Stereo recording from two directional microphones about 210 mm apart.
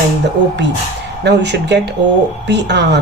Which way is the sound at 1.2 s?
55° right (ahead or behind).